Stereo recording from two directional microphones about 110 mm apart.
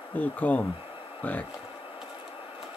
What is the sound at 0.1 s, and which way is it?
Speech, 15° left (ahead or behind).